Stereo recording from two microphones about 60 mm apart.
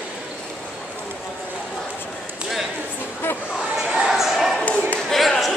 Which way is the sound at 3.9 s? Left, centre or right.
Centre.